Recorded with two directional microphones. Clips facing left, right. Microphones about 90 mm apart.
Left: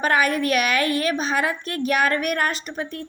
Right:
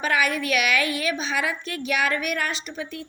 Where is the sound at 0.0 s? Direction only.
45° left (ahead or behind).